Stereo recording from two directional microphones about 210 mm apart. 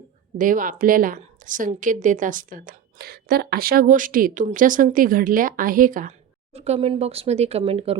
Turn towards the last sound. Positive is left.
turn(degrees=-25)  # may be behind; listen again after turning